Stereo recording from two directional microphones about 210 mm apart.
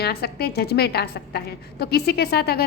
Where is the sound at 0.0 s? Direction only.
50° left (ahead or behind).